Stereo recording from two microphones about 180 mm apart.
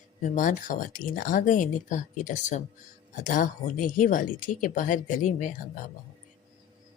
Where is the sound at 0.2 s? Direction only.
45° left (ahead or behind).